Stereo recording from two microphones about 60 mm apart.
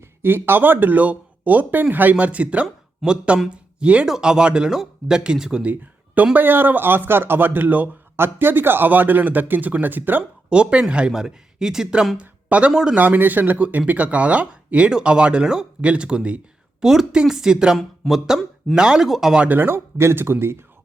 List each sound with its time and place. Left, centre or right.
0.2 s speech: right
3.0 s speech: centre
3.5 s speech: centre
5.6 s a sound: right
6.3 s speech: right
10.5 s speech: centre
12.1 s speech: right
12.7 s speech: centre
13.0 s speech: right
16.8 s speech: centre
17.7 s speech: centre
18.7 s speech: centre
19.5 s speech: right